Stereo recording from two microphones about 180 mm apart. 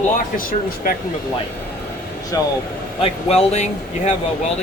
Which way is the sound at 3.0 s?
35° left (ahead or behind).